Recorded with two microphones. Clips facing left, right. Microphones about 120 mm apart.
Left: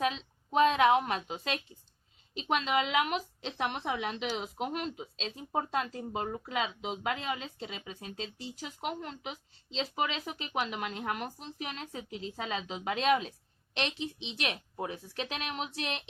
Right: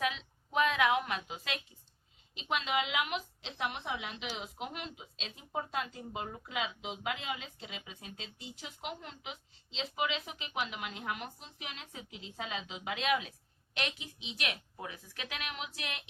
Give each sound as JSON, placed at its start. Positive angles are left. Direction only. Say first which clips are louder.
{"t": 0.0, "sound": "a sound", "louder": "left 4 dB", "side_deg": 30}
{"t": 2.3, "sound": "a woman's voice", "louder": "left 4 dB", "side_deg": 40}
{"t": 8.6, "sound": "a woman's voice", "louder": "left 6 dB", "side_deg": 45}